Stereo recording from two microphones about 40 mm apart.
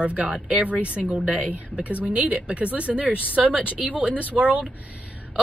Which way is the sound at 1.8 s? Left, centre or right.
Right.